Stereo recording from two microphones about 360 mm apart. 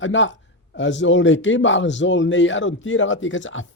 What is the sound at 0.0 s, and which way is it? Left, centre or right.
A man's voice, left.